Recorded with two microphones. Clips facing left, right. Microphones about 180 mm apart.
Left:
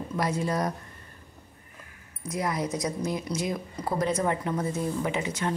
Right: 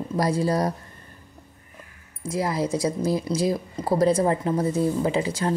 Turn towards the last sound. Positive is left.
turn(degrees=-35)  # may be behind; listen again after turning